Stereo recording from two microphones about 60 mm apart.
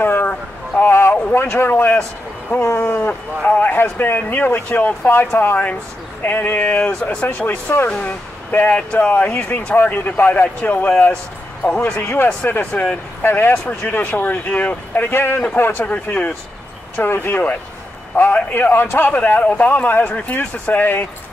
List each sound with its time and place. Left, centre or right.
0.0 s boat: left
1.3 s a sound: left
2.9 s livestock: left
4.2 s a man's voice: left
7.7 s a man's voice: left
8.0 s speech: centre
9.1 s a man's voice: left
13.7 s speech: left
15.0 s a man's voice: left